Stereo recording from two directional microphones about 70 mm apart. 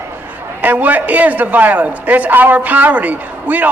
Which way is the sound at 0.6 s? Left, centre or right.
Right.